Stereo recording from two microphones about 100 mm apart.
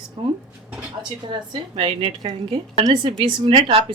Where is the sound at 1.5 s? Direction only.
60° right (ahead or behind).